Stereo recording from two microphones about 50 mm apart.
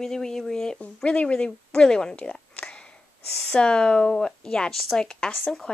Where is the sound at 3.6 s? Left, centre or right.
Centre.